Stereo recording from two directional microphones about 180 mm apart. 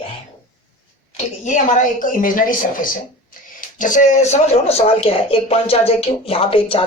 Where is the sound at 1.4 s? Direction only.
45° left (ahead or behind).